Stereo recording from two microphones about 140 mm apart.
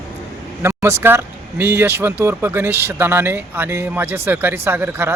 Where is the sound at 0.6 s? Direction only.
15° right (ahead or behind).